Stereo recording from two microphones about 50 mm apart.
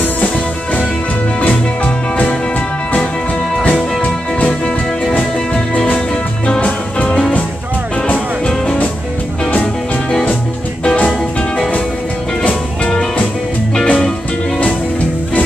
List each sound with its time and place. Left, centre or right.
4.0 s music: left
5.9 s music: left
11.1 s music: centre
13.8 s music: centre